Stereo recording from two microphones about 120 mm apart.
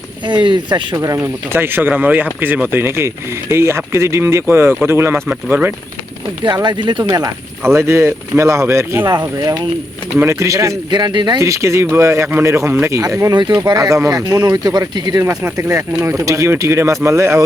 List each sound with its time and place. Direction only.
0.4 s speech: 40° right (ahead or behind); by 5.7 s 15° right (ahead or behind)
6.4 s speech: 40° right (ahead or behind)
11.4 s speech: 25° right (ahead or behind)